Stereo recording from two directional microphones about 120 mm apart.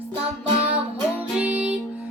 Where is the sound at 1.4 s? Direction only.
10° right (ahead or behind).